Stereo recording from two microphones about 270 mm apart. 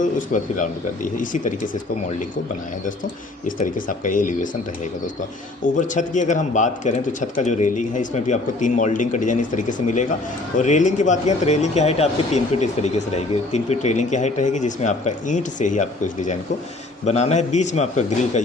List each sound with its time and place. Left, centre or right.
0.0 s speech: left
3.4 s speech: left
5.6 s speech: left